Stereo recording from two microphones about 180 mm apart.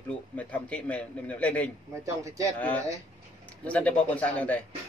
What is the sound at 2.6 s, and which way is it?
A man's voice, 10° left (ahead or behind).